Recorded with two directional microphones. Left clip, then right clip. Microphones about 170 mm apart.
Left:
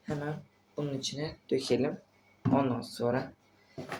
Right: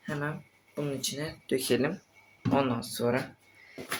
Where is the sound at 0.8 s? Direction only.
35° right (ahead or behind).